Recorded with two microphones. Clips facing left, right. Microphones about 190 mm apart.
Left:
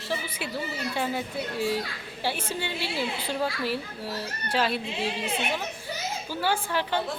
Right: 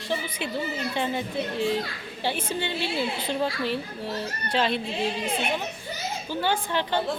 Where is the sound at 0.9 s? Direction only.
5° left (ahead or behind).